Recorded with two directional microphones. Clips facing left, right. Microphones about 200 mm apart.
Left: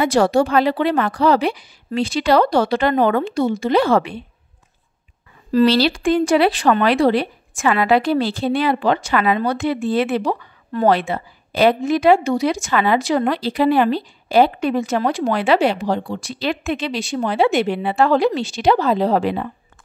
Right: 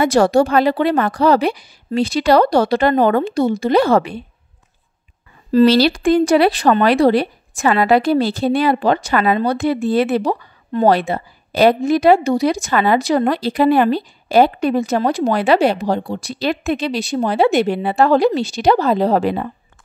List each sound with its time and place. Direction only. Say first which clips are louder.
0.0 s a woman's voice: right 2 dB; 45° right (ahead or behind)
5.7 s a woman's voice: right 3 dB; 40° right (ahead or behind)